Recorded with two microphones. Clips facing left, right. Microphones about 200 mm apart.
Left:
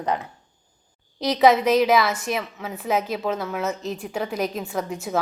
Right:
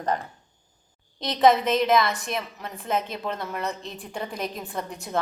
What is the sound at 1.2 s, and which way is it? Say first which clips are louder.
A woman's voice: left 3 dB; 5° left (ahead or behind).